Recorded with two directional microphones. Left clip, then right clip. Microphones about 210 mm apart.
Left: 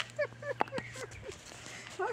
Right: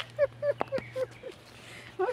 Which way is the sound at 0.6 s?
35° left (ahead or behind).